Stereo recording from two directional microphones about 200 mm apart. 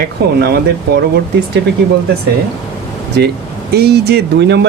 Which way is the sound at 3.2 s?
55° right (ahead or behind).